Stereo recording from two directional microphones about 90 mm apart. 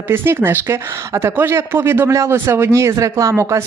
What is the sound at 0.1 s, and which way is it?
Speech, 25° right (ahead or behind).